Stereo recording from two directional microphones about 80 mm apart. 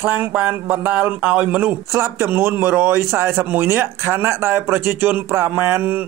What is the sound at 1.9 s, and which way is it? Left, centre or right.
Speech, right.